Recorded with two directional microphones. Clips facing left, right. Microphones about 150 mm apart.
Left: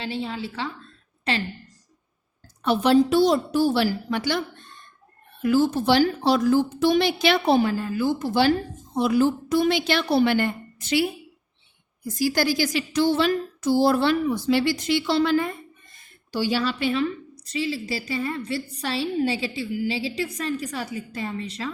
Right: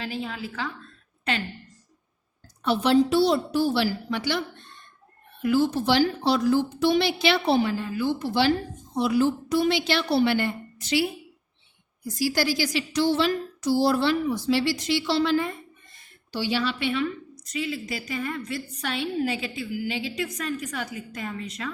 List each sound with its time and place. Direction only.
0.0 s a woman's voice: 30° left (ahead or behind)
2.6 s a woman's voice: 50° left (ahead or behind)
12.2 s a woman's voice: 50° left (ahead or behind); by 21.7 s 30° left (ahead or behind)